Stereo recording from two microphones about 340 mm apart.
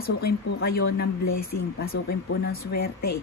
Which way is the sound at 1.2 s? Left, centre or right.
Left.